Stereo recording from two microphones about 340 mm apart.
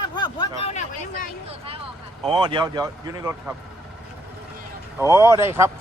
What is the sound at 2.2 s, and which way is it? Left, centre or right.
Speech, centre.